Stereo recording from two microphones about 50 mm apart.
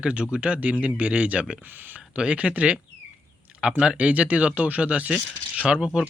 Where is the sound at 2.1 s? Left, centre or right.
Right.